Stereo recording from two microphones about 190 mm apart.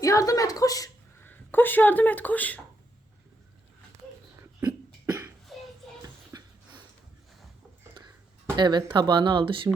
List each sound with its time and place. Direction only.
0.0 s a woman's voice: 20° left (ahead or behind)
5.0 s cough: 20° right (ahead or behind)
5.5 s music: centre (ahead or behind)
6.3 s a sound: 20° right (ahead or behind)
8.5 s speech: 25° right (ahead or behind)